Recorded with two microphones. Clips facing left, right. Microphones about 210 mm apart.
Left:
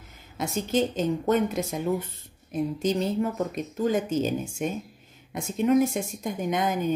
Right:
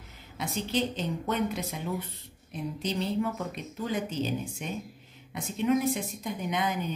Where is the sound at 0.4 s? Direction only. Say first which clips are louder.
Left 5 dB; 45° left (ahead or behind).